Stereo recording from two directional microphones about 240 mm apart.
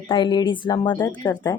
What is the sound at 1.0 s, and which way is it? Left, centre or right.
Speech, centre.